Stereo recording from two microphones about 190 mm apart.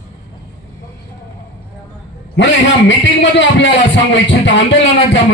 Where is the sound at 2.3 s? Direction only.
70° left (ahead or behind).